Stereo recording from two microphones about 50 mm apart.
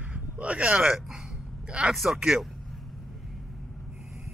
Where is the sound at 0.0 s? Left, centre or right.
Right.